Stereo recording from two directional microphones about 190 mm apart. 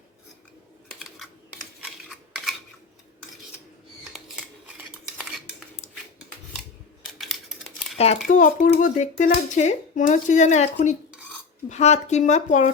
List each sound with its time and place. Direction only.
2.0 s a sound: centre (ahead or behind)
7.0 s typing: centre (ahead or behind)
7.9 s speech: 35° left (ahead or behind)